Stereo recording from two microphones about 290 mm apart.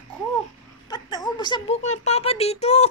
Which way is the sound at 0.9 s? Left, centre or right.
Centre.